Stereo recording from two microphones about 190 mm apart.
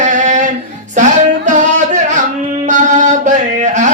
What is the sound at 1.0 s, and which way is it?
Music, 40° right (ahead or behind).